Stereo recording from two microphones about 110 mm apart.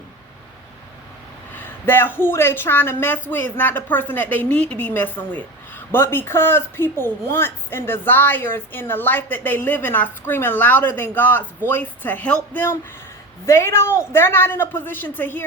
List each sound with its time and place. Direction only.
1.5 s speech: 20° left (ahead or behind)